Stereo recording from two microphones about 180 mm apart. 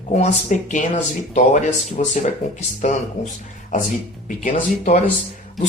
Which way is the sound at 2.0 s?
45° left (ahead or behind).